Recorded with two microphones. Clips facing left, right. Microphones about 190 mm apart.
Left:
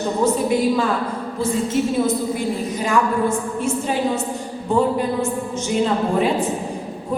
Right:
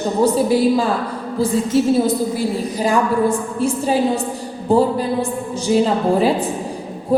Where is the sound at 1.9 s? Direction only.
35° right (ahead or behind).